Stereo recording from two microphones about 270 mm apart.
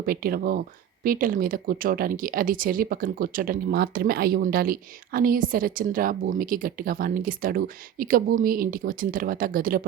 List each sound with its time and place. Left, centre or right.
0.0 s speech: right